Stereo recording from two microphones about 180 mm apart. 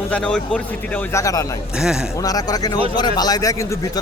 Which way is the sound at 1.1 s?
20° left (ahead or behind).